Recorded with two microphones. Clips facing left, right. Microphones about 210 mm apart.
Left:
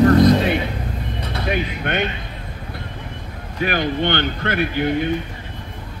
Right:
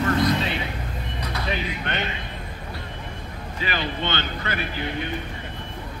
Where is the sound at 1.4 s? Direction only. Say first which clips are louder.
Left 7 dB; 55° left (ahead or behind).